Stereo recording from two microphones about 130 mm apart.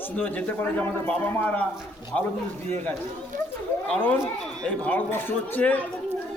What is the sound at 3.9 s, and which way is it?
Speech, 10° left (ahead or behind).